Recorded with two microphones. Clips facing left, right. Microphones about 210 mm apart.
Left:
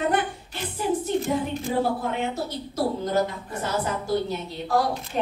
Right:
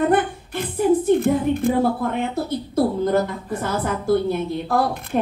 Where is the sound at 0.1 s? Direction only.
55° right (ahead or behind).